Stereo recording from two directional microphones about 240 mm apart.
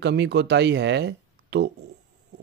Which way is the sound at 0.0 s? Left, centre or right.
Right.